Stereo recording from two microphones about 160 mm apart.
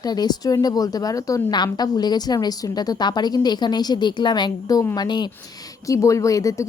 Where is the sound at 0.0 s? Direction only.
25° left (ahead or behind).